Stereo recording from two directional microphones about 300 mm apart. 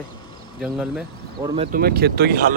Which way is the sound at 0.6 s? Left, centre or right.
Centre.